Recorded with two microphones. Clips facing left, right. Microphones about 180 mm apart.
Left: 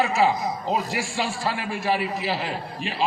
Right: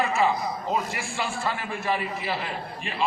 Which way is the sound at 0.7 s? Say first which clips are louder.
Left 2 dB; 35° left (ahead or behind).